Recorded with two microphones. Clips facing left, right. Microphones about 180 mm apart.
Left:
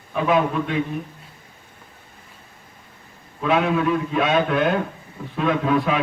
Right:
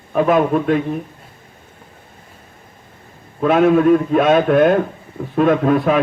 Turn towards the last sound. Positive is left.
turn(degrees=-50)  # may be behind; listen again after turning